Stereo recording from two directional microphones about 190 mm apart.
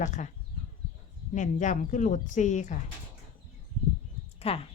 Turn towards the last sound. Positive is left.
turn(degrees=30)  # may be behind; listen again after turning